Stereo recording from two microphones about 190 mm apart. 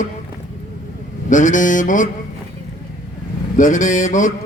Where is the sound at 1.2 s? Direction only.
40° left (ahead or behind).